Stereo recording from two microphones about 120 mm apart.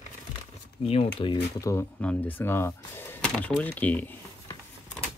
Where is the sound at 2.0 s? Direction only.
10° left (ahead or behind).